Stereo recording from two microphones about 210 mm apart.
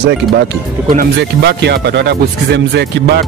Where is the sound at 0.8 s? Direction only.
45° right (ahead or behind).